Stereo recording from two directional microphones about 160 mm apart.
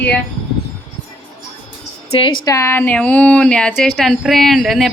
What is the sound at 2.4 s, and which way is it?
A woman's voice, 15° left (ahead or behind).